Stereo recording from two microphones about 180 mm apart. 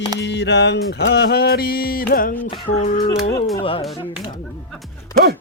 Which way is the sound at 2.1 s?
50° left (ahead or behind).